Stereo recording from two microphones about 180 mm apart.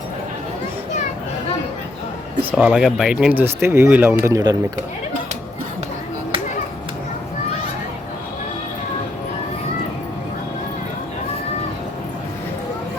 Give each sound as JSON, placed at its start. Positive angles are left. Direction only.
{"t": 2.5, "sound": "speech", "side_deg": -5}